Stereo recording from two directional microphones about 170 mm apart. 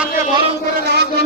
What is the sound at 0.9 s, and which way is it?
Speech, 75° right (ahead or behind).